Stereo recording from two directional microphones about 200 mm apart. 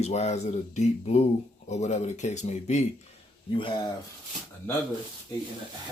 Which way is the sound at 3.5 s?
25° left (ahead or behind).